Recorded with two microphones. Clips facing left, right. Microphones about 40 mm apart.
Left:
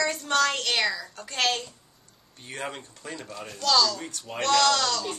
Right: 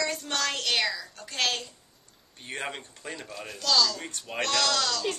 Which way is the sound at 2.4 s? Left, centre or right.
Right.